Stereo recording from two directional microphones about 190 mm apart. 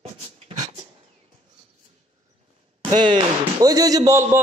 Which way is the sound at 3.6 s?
20° right (ahead or behind).